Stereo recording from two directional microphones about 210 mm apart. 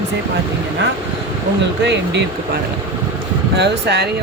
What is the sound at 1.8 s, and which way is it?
Speech, 55° right (ahead or behind).